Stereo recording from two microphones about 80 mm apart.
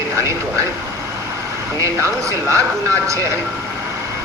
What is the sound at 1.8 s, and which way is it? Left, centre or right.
Speech, right.